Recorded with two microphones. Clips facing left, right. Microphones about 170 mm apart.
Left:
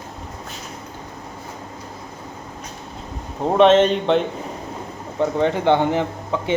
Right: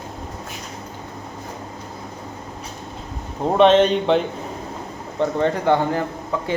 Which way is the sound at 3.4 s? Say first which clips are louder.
Left 1 dB; centre (ahead or behind).